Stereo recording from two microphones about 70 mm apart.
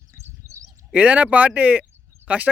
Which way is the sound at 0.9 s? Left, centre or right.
Centre.